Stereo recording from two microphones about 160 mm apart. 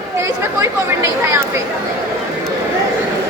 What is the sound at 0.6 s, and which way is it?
Speech, 15° right (ahead or behind).